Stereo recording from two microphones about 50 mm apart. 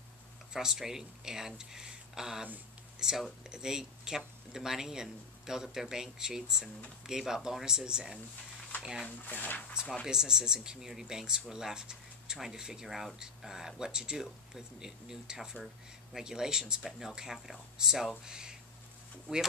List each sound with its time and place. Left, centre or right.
0.5 s speech: centre
9.0 s speech: left
10.0 s speech: centre
16.3 s speech: centre